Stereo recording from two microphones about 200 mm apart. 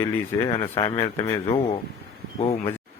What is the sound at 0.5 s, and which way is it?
Speech, 25° left (ahead or behind).